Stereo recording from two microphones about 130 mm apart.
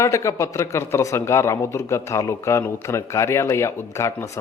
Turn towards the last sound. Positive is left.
turn(degrees=20)  # may be behind; listen again after turning